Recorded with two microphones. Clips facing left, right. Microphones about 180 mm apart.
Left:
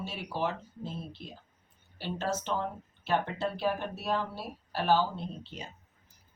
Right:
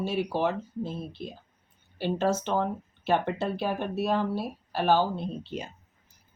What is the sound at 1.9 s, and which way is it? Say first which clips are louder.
Speech: right 8 dB; 60° right (ahead or behind).